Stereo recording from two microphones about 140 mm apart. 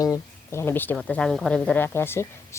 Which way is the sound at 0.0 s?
20° left (ahead or behind).